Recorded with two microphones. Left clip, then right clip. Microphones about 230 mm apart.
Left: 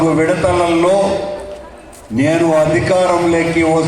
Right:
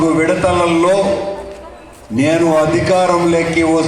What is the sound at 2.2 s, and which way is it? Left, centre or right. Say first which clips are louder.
A man's voice: even; right.